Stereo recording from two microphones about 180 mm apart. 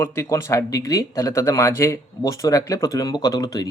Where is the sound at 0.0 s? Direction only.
15° left (ahead or behind).